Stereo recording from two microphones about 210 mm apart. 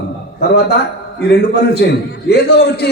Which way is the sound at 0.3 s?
50° left (ahead or behind).